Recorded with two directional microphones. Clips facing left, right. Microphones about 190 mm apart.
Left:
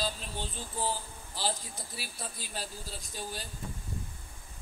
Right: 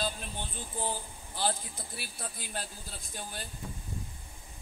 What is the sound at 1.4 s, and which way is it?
Speech, 55° right (ahead or behind).